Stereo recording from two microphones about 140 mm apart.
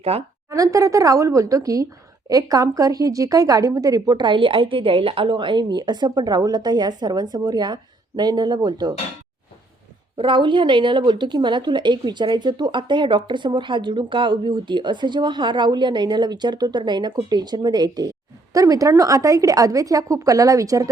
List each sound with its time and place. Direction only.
0.1 s speech: 45° right (ahead or behind)
0.5 s a woman's voice: 25° right (ahead or behind)
10.2 s a woman's voice: 35° right (ahead or behind)